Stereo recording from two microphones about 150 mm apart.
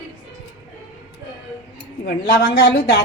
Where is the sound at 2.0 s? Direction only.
90° left.